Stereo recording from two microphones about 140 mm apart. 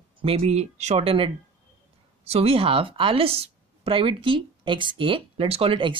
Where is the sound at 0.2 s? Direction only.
45° right (ahead or behind).